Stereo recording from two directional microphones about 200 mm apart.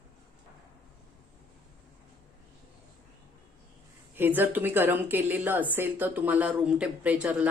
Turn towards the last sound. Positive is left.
turn(degrees=-5)  # may be behind; listen again after turning